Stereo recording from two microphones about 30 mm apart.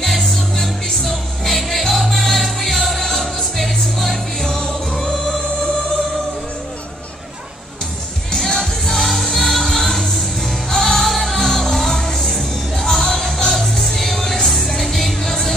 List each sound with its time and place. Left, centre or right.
0.0 s music: centre
5.0 s choir: left
8.3 s music: centre
11.1 s music: centre